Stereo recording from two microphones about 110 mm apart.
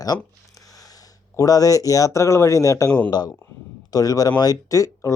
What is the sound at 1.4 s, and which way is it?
Speech, 35° left (ahead or behind).